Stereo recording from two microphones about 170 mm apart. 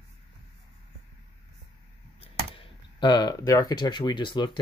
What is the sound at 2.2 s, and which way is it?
Speech, 30° left (ahead or behind).